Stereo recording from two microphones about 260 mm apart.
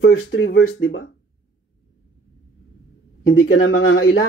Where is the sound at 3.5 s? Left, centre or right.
Left.